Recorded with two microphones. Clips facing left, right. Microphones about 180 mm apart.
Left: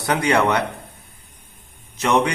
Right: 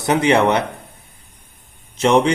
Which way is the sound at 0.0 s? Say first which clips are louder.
Right 4 dB; 20° right (ahead or behind).